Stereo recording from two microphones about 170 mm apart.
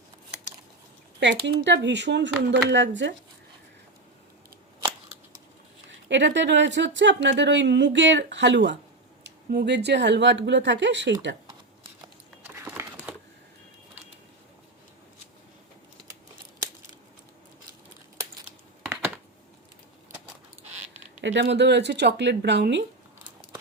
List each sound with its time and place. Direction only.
1.2 s speech: 90° right
6.1 s speech: 90° right
12.6 s crumpling: 10° right (ahead or behind)
21.2 s speech: 90° right